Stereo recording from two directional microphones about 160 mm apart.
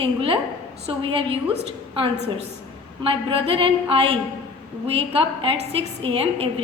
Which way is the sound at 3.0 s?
35° right (ahead or behind).